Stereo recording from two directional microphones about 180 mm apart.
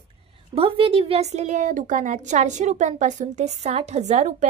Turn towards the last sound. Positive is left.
turn(degrees=-40)  # may be behind; listen again after turning